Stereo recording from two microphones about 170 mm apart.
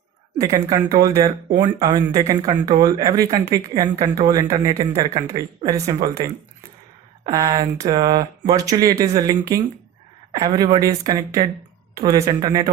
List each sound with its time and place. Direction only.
0.3 s speech: 20° right (ahead or behind)